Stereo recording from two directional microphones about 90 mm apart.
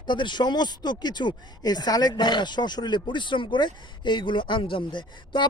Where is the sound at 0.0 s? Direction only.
60° left (ahead or behind).